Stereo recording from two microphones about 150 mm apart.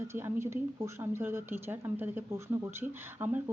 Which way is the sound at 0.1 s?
15° right (ahead or behind).